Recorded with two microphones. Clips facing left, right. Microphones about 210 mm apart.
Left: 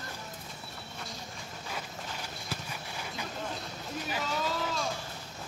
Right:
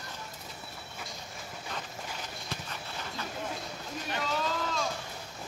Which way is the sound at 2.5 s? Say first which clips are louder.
Left 1 dB; 10° left (ahead or behind).